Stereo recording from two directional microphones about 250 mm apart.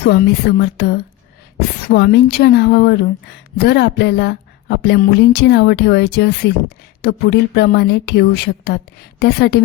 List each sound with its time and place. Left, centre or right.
0.0 s a woman's voice: left